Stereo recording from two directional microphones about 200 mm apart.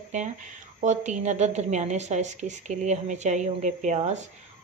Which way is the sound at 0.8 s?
35° right (ahead or behind).